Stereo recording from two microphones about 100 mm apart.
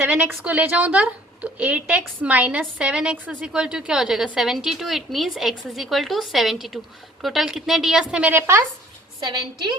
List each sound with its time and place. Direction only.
0.0 s a woman's voice: 15° right (ahead or behind)
8.3 s a woman's voice: 25° right (ahead or behind)